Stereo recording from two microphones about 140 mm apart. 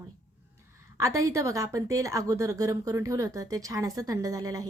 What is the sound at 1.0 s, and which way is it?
Speech, 20° right (ahead or behind).